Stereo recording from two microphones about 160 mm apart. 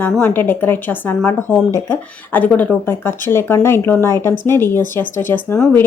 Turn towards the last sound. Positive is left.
turn(degrees=10)  # may be behind; listen again after turning